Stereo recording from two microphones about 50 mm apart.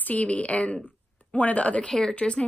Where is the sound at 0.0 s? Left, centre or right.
Left.